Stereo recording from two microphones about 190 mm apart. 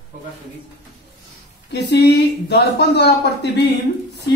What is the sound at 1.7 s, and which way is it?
Speech, 65° left (ahead or behind).